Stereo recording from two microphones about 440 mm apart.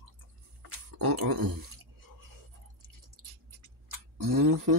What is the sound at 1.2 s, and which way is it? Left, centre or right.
Chewing, right.